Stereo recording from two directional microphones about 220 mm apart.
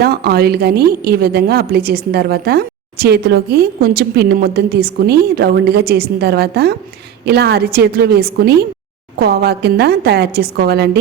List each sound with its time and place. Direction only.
0.0 s a woman's voice: 45° right (ahead or behind)